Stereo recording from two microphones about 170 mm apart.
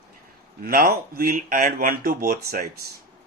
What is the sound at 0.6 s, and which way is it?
Speech, 55° right (ahead or behind).